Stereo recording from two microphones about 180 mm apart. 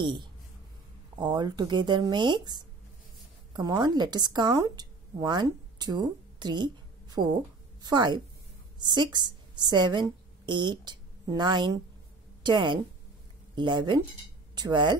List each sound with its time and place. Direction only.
0.0 s a woman's voice: 25° right (ahead or behind)